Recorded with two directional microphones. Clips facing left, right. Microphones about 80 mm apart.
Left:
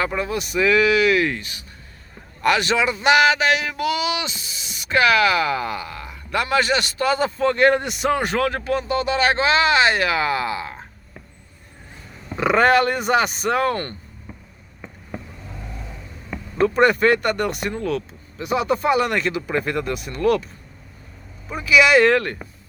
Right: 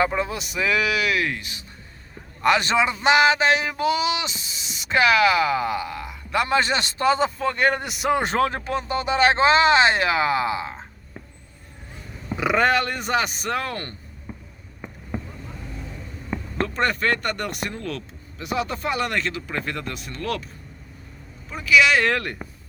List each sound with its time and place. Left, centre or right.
0.0 s speech: centre
1.4 s speech: centre
2.4 s a sound: right
7.3 s speech: centre
8.1 s a sound: right
12.3 s speech: centre
16.6 s speech: centre
21.5 s speech: centre